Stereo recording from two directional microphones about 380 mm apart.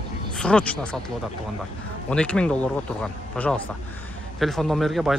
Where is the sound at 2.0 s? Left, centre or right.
Centre.